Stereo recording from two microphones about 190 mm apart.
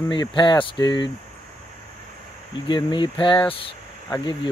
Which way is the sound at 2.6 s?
25° left (ahead or behind).